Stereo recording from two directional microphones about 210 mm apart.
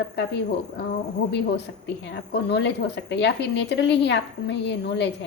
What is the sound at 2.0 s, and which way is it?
A woman's voice, 55° left (ahead or behind).